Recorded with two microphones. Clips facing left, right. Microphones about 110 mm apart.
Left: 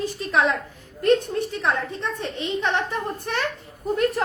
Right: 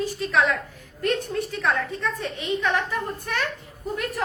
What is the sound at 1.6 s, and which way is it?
A woman's voice, 25° left (ahead or behind).